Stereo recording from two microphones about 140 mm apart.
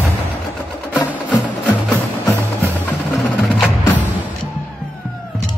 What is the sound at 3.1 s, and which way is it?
Wood block, centre (ahead or behind).